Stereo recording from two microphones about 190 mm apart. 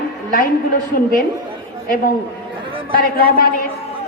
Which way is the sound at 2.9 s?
50° left (ahead or behind).